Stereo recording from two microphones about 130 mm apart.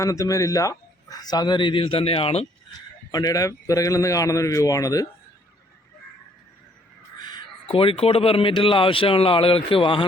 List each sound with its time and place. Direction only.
0.0 s speech: 25° left (ahead or behind); by 2.5 s 50° left (ahead or behind)
3.1 s a man's voice: 30° left (ahead or behind)
7.2 s crow: 35° left (ahead or behind)
7.7 s a man's voice: 45° left (ahead or behind)